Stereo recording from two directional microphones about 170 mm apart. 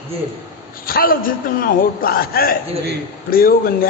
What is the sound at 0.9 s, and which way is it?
A man's voice, 60° left (ahead or behind).